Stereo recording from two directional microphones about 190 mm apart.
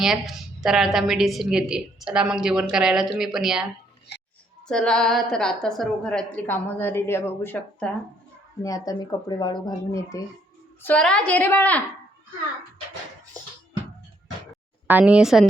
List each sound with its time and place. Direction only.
0.0 s a woman's voice: centre (ahead or behind)
4.7 s a woman's voice: 5° left (ahead or behind)
10.8 s a woman's voice: 5° left (ahead or behind)
14.8 s a woman's voice: 5° right (ahead or behind)